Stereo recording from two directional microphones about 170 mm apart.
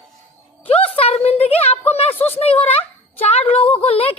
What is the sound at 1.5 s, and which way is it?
Speech, 35° left (ahead or behind).